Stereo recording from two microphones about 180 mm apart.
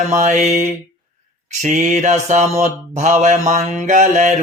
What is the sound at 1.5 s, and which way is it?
Mantra, 40° right (ahead or behind).